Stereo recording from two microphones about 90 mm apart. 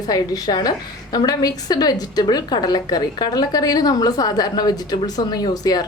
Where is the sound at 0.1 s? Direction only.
45° left (ahead or behind).